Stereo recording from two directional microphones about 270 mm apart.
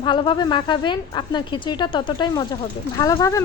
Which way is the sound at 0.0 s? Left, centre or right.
Centre.